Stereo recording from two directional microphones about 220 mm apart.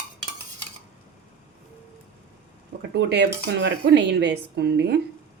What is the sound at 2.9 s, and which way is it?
Speech, 50° right (ahead or behind).